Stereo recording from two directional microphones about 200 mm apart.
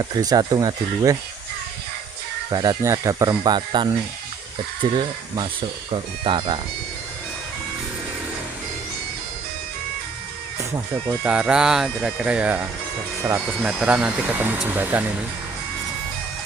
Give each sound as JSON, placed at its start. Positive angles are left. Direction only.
{"t": 0.0, "sound": "speech", "side_deg": -20}
{"t": 2.5, "sound": "speech", "side_deg": -20}
{"t": 11.2, "sound": "speech", "side_deg": -5}